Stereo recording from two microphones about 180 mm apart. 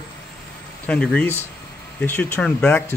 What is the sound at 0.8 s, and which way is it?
A man's voice, 5° left (ahead or behind).